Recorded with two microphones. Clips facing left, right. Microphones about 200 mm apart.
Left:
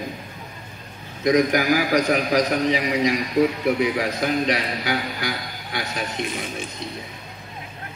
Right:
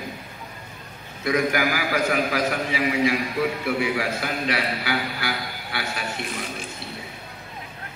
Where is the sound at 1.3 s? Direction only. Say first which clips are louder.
Left 4 dB; 20° left (ahead or behind).